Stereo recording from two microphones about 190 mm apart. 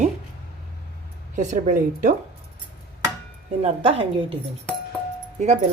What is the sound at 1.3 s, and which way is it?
Speech, 40° right (ahead or behind).